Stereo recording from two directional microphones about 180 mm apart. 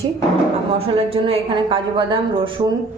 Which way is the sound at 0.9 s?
30° right (ahead or behind).